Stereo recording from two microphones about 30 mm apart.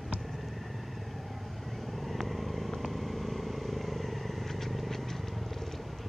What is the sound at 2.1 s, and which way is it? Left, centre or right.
Vehicle, centre.